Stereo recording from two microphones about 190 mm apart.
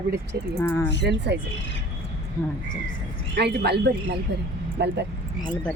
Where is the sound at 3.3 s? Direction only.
60° right (ahead or behind).